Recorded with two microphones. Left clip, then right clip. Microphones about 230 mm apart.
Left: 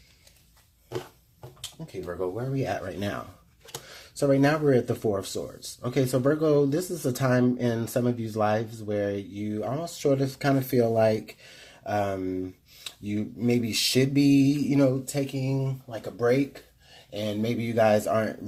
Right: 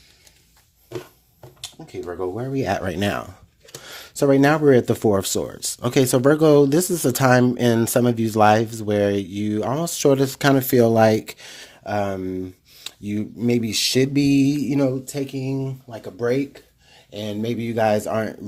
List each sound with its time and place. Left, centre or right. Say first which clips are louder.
1.9 s speech: right 4 dB; right
3.0 s speech: right 9 dB; right
3.8 s speech: right 6 dB; right